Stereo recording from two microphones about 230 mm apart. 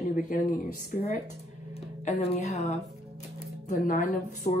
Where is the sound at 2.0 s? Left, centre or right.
Left.